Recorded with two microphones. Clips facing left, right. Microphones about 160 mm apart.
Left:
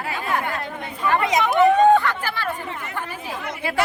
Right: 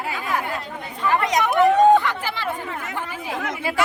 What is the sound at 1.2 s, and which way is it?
Chatter, 5° left (ahead or behind).